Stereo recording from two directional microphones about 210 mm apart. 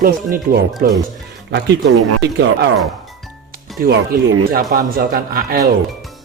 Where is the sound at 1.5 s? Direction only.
55° right (ahead or behind).